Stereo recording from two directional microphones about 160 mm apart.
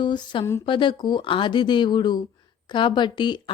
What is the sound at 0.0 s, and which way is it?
A woman's voice, 30° left (ahead or behind).